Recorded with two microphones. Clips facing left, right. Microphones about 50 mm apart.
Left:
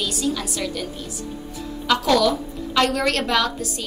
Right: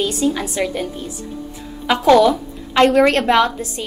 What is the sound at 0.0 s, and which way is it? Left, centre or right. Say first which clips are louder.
A woman's voice: right 6 dB; right.